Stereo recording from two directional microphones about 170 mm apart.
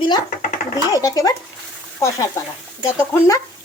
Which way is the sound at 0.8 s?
20° left (ahead or behind).